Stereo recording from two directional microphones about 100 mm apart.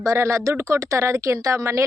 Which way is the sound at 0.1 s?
30° right (ahead or behind).